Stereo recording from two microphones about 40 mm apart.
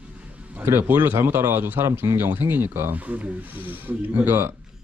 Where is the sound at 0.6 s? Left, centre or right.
Right.